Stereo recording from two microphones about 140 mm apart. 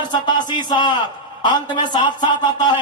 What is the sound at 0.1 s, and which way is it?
A man's voice, 30° left (ahead or behind).